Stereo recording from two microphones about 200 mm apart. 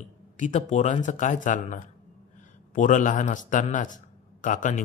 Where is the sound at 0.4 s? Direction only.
40° left (ahead or behind).